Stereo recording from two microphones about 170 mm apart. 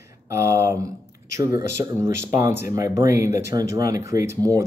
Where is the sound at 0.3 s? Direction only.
15° right (ahead or behind).